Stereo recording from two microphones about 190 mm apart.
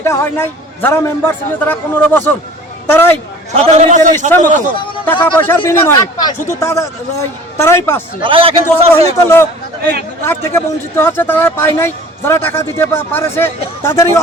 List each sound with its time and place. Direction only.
0.0 s speech: 15° left (ahead or behind)
3.5 s a man's voice: 35° right (ahead or behind)
5.2 s speech: 10° left (ahead or behind)
8.2 s a man's voice: 30° right (ahead or behind)
8.9 s speech: 15° left (ahead or behind)